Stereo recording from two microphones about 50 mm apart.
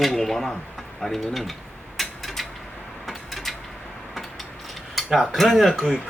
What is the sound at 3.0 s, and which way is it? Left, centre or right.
Mechanisms, centre.